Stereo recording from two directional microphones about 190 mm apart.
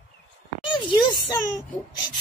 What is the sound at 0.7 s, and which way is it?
Speech, 20° left (ahead or behind).